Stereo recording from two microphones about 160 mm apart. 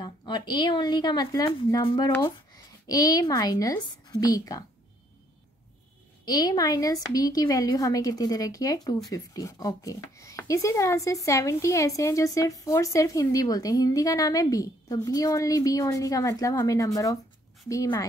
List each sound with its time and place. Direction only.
0.0 s speech: 30° left (ahead or behind)
6.2 s speech: 25° left (ahead or behind)